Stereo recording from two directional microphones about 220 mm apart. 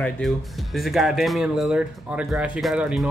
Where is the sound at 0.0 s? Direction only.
Centre (ahead or behind).